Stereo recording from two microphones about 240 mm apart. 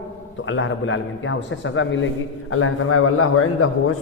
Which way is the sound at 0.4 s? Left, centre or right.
Left.